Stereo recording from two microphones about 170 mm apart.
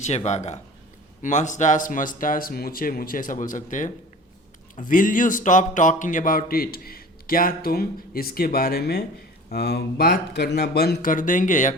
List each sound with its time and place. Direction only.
0.0 s speech: 40° left (ahead or behind)